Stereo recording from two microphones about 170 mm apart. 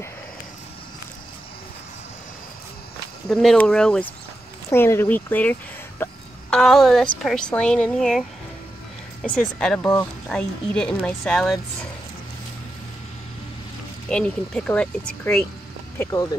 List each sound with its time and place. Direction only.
3.3 s a woman's voice: 5° left (ahead or behind)
14.0 s a woman's voice: 5° left (ahead or behind)
16.0 s speech: 20° left (ahead or behind)